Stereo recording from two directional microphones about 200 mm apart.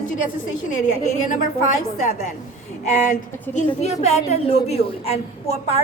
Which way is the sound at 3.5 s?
10° left (ahead or behind).